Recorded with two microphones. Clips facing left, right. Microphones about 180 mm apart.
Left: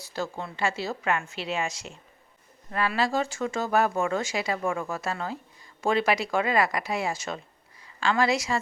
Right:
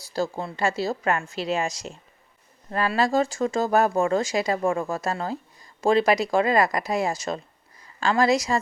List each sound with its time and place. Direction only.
0.1 s speech: 35° right (ahead or behind)